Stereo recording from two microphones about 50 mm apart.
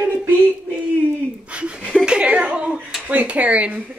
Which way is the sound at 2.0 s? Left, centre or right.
Centre.